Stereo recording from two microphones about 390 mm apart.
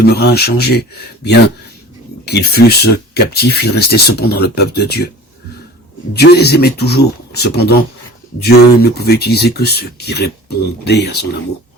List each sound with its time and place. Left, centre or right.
0.0 s speech: left
6.1 s speech: left